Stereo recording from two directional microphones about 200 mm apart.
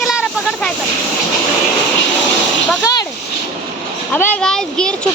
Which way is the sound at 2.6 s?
15° left (ahead or behind).